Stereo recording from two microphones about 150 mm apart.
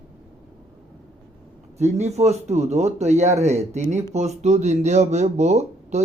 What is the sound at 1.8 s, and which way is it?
Speech, 45° right (ahead or behind).